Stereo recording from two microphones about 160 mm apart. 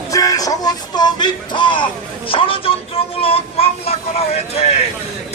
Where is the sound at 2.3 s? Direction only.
35° left (ahead or behind).